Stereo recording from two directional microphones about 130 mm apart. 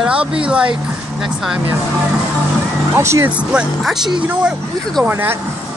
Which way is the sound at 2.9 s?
20° right (ahead or behind).